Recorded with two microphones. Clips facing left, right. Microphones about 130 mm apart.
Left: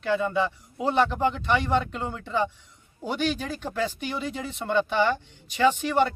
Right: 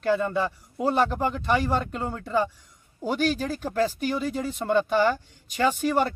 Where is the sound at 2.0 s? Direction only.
40° right (ahead or behind).